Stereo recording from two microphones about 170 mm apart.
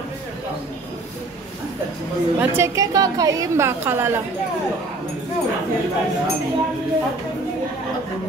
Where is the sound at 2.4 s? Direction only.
15° right (ahead or behind).